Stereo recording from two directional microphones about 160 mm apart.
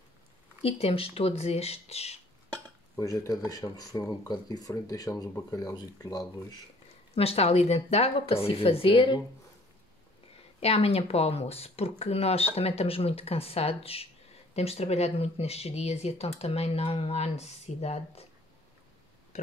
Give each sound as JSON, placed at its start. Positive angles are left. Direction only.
{"t": 0.6, "sound": "speech", "side_deg": 40}
{"t": 3.0, "sound": "speech", "side_deg": 20}
{"t": 7.2, "sound": "speech", "side_deg": 40}
{"t": 10.6, "sound": "speech", "side_deg": 40}